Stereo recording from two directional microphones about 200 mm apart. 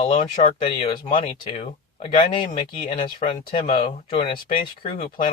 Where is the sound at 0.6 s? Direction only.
30° left (ahead or behind).